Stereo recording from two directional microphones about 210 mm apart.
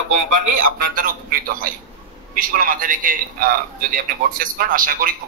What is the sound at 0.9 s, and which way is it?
A man's voice, 40° right (ahead or behind).